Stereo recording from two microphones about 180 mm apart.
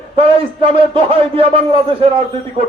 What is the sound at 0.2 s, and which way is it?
A man's voice, 30° right (ahead or behind).